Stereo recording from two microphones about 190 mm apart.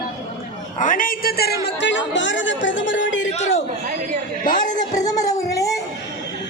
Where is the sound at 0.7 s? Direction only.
45° left (ahead or behind); by 3.3 s 75° left (ahead or behind).